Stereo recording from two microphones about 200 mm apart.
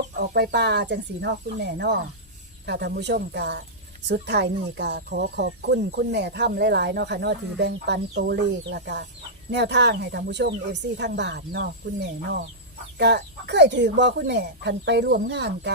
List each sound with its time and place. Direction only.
0.2 s speech: 55° right (ahead or behind)